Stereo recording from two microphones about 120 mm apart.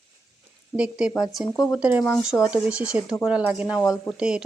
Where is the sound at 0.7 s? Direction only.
10° right (ahead or behind).